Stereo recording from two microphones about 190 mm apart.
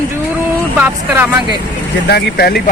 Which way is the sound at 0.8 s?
10° right (ahead or behind).